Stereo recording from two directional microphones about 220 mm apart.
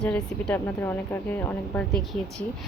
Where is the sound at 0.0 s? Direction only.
5° left (ahead or behind).